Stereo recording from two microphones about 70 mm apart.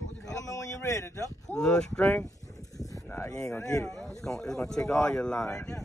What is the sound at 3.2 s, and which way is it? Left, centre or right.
Speech, left.